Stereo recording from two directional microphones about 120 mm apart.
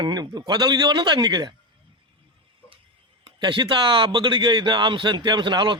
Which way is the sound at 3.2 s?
40° right (ahead or behind).